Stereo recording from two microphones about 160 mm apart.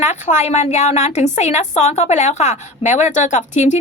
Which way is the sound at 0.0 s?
50° left (ahead or behind).